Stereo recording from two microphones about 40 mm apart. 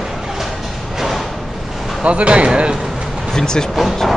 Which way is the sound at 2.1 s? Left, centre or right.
Right.